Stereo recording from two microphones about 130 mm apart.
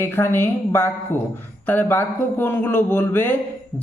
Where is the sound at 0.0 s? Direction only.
20° left (ahead or behind).